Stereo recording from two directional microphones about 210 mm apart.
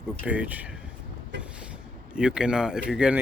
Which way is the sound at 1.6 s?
5° right (ahead or behind).